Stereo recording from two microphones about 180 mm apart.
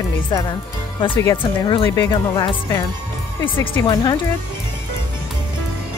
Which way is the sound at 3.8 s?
25° left (ahead or behind).